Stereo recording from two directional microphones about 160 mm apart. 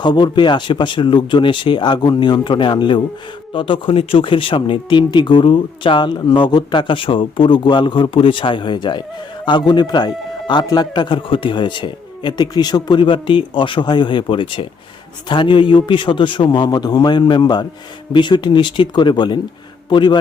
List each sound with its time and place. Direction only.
0.0 s speech: 30° left (ahead or behind)